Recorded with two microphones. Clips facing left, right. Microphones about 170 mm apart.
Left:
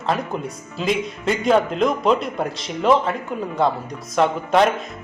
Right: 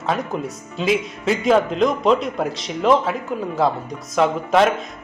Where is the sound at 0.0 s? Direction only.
Centre (ahead or behind).